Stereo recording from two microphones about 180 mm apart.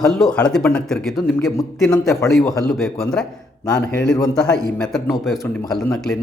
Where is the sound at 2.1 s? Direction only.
15° left (ahead or behind).